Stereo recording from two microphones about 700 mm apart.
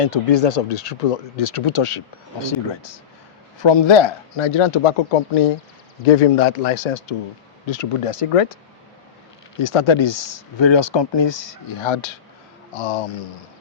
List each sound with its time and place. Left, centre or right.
0.0 s speech: left
6.1 s speech: left
7.7 s speech: left
9.6 s speech: left